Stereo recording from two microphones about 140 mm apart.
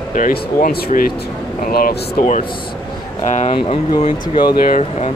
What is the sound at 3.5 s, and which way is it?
Speech, 40° left (ahead or behind).